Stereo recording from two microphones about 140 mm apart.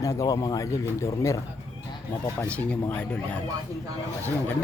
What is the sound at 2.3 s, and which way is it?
Speech, 10° left (ahead or behind).